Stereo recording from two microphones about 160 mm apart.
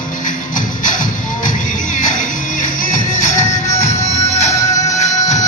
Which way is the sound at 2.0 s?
50° left (ahead or behind).